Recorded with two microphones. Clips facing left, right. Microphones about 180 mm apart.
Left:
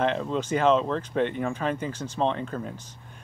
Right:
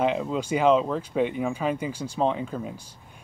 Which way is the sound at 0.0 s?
10° right (ahead or behind).